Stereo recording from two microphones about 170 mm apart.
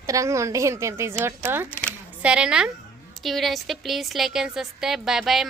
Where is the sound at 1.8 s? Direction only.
10° left (ahead or behind).